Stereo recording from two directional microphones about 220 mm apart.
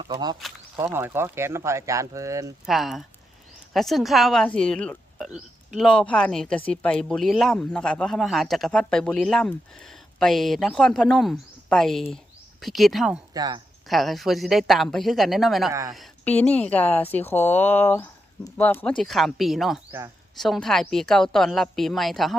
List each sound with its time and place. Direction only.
0.0 s speech: 20° right (ahead or behind)
2.6 s speech: centre (ahead or behind)
13.3 s speech: 15° right (ahead or behind)
13.8 s speech: centre (ahead or behind)
15.7 s speech: 15° right (ahead or behind)
16.0 s speech: 5° left (ahead or behind)